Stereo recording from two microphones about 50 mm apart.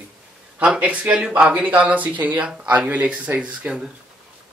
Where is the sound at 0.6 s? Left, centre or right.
Right.